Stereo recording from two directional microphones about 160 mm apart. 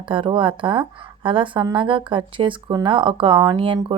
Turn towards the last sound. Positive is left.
turn(degrees=-30)  # may be behind; listen again after turning